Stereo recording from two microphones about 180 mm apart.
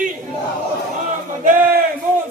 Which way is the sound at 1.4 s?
50° right (ahead or behind).